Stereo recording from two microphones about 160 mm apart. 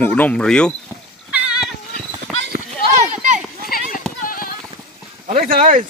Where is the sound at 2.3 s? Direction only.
5° left (ahead or behind).